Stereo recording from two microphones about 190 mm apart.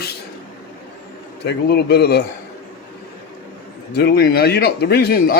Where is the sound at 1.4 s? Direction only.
60° left (ahead or behind).